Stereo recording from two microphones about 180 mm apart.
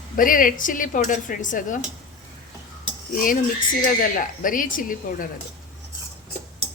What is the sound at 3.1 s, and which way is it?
Dishes, 50° left (ahead or behind).